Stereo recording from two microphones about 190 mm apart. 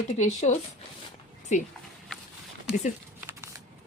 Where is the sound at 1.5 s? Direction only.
40° left (ahead or behind).